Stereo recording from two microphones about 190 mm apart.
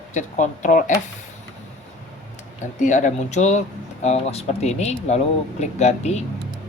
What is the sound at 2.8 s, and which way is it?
Speech, 40° left (ahead or behind).